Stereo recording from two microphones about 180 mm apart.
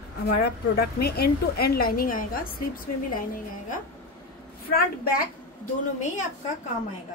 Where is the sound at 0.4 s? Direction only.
60° left (ahead or behind).